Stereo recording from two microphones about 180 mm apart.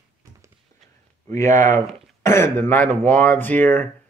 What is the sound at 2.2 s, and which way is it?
Speech, 15° left (ahead or behind).